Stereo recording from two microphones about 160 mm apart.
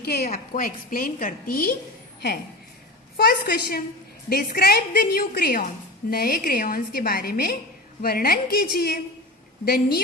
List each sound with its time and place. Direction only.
0.0 s a woman's voice: 75° left (ahead or behind)
3.2 s a woman's voice: 70° left (ahead or behind)